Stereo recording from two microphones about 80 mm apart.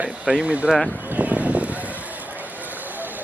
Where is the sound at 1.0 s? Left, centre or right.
Centre.